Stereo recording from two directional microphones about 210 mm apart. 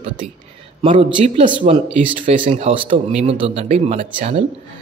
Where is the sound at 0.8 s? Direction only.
25° right (ahead or behind).